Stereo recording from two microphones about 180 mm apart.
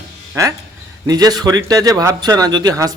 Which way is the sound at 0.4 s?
15° right (ahead or behind).